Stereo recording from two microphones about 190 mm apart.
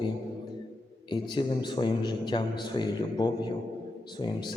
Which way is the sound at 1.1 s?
25° left (ahead or behind).